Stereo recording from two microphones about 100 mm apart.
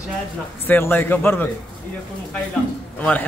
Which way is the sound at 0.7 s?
20° left (ahead or behind).